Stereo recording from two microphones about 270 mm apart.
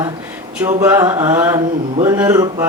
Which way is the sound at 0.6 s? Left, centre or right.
Centre.